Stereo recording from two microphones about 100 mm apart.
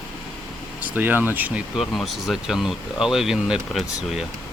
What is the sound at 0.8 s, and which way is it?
Speech, 20° right (ahead or behind).